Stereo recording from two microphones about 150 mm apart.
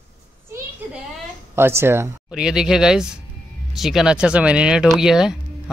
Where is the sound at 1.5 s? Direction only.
15° right (ahead or behind).